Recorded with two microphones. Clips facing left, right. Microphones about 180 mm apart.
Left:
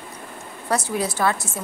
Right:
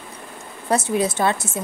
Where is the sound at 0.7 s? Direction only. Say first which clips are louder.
Right 4 dB; 20° right (ahead or behind).